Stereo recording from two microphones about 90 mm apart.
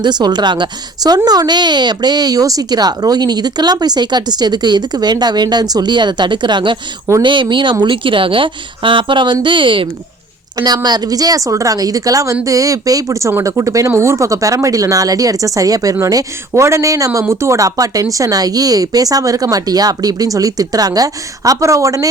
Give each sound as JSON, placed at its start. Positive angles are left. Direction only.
{"t": 0.0, "sound": "a woman's voice", "side_deg": -50}
{"t": 10.8, "sound": "speech", "side_deg": -50}